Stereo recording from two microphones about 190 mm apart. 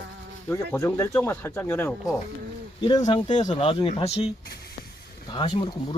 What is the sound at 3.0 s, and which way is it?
Speech, 40° left (ahead or behind).